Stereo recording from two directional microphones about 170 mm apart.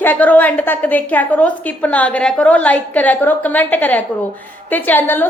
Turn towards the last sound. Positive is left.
turn(degrees=10)  # may be behind; listen again after turning